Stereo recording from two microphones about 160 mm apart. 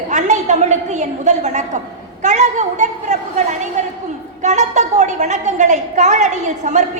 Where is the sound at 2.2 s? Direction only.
45° right (ahead or behind).